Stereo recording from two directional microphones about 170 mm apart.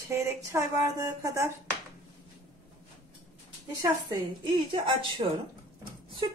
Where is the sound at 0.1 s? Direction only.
15° right (ahead or behind).